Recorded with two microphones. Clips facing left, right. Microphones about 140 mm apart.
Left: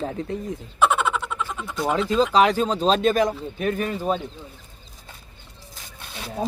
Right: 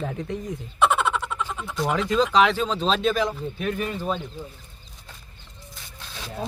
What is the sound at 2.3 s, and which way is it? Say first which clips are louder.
Speech: left 2 dB; 40° left (ahead or behind).